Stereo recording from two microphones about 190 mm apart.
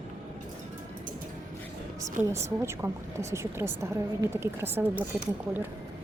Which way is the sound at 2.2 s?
10° right (ahead or behind).